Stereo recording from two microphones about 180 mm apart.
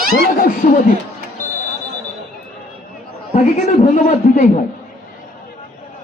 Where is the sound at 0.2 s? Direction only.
50° left (ahead or behind).